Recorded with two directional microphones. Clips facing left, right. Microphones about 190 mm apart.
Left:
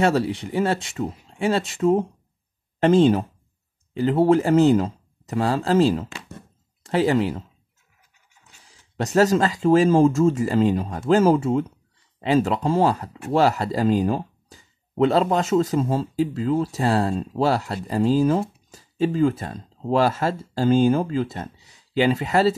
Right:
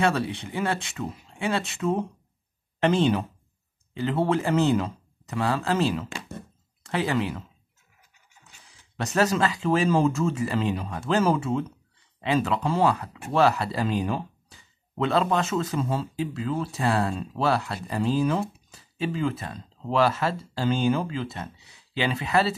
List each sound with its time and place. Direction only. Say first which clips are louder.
0.0 s speech: left 4 dB; 40° left (ahead or behind)
9.1 s speech: left 5 dB; 40° left (ahead or behind)